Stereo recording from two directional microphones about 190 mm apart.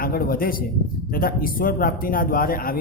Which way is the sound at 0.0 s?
50° left (ahead or behind).